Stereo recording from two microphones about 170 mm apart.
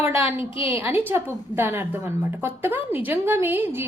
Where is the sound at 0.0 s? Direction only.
15° right (ahead or behind).